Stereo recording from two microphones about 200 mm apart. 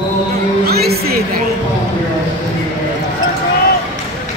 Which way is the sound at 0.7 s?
50° right (ahead or behind).